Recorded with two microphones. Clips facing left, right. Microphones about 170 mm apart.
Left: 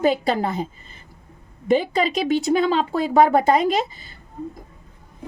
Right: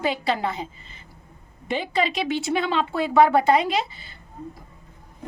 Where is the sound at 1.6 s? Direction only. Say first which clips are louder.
Left 5 dB; 45° left (ahead or behind).